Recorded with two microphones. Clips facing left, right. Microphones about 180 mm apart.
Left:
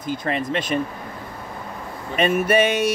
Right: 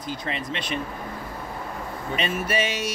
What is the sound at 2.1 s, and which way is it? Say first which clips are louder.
Speech: left 8 dB; 55° left (ahead or behind).